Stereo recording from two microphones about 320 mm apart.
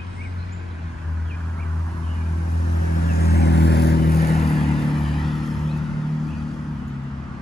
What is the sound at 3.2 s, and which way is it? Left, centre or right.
Vehicle, left.